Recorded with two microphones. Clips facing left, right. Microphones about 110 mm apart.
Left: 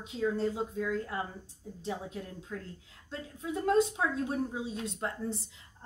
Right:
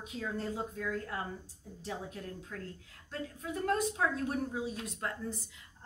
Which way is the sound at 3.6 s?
20° left (ahead or behind).